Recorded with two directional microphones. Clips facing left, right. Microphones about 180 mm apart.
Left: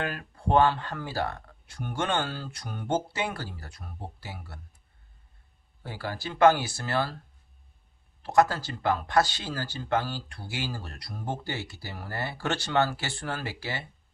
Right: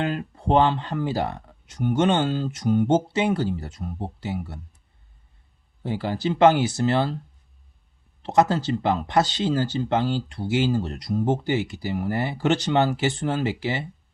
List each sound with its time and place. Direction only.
0.0 s speech: 20° right (ahead or behind)
5.8 s speech: 20° right (ahead or behind)
8.2 s speech: 20° right (ahead or behind)